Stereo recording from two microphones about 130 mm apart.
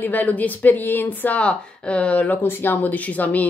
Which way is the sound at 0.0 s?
15° left (ahead or behind).